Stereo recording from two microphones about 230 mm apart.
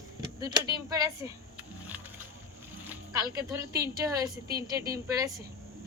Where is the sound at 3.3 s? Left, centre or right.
Centre.